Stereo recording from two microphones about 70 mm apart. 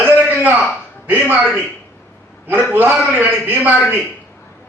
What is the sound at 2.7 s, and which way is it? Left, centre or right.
Speech, right.